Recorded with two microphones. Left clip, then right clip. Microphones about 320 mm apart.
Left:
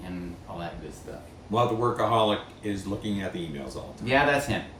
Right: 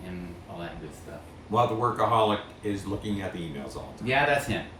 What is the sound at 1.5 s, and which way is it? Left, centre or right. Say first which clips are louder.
Speech: even; centre.